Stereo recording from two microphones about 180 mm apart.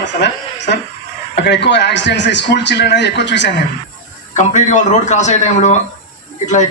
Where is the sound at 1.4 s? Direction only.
75° left (ahead or behind).